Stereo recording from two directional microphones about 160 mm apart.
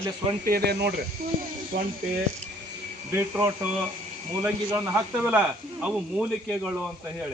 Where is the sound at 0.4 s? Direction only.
80° right.